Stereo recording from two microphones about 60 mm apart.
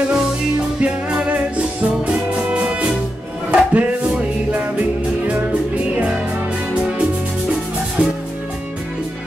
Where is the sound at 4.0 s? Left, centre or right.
Centre.